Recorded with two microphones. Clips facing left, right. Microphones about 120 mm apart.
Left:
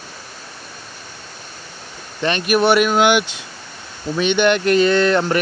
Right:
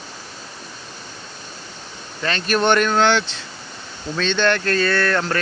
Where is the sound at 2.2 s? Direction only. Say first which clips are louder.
Left 3 dB; 15° left (ahead or behind).